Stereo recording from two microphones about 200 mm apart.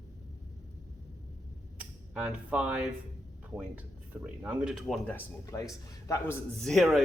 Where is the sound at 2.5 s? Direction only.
5° right (ahead or behind).